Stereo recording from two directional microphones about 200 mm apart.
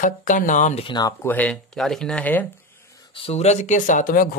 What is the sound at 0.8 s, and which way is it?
Speech, 20° left (ahead or behind).